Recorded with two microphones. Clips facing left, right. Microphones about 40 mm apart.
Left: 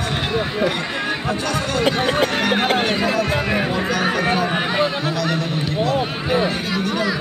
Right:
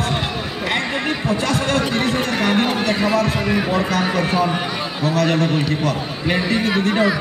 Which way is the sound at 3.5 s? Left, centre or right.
Centre.